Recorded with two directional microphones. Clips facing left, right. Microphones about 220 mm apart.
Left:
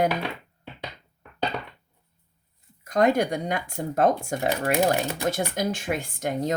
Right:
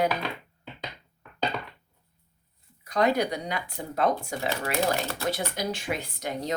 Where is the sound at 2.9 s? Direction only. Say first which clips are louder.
Left 3 dB; 50° left (ahead or behind).